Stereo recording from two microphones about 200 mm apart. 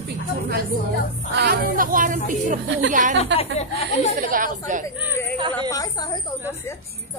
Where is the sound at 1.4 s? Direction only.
45° right (ahead or behind).